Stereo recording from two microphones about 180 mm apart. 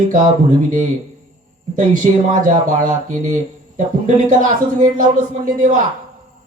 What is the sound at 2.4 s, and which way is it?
Speech, 50° right (ahead or behind).